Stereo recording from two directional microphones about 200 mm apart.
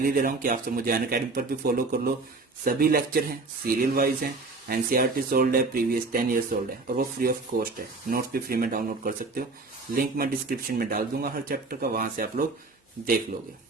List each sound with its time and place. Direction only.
0.0 s speech: 45° right (ahead or behind)